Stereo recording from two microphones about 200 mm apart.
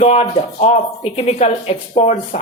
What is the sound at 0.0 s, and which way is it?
Speech, 35° left (ahead or behind).